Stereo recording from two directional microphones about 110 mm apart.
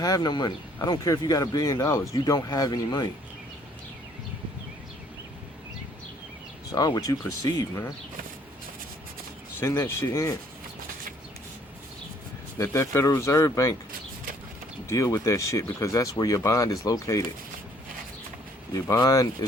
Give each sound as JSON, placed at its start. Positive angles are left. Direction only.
{"t": 0.0, "sound": "speech", "side_deg": 35}
{"t": 6.7, "sound": "speech", "side_deg": 35}
{"t": 9.6, "sound": "speech", "side_deg": 25}
{"t": 12.5, "sound": "speech", "side_deg": 25}
{"t": 14.8, "sound": "speech", "side_deg": 25}
{"t": 18.7, "sound": "speech", "side_deg": 35}